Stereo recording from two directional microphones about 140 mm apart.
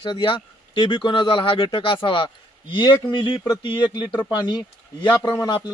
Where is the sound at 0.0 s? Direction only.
35° left (ahead or behind).